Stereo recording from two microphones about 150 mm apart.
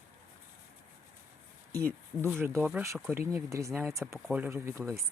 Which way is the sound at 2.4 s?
15° right (ahead or behind).